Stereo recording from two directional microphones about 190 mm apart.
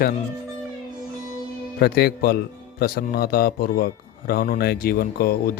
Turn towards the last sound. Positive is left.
turn(degrees=50)  # may be behind; listen again after turning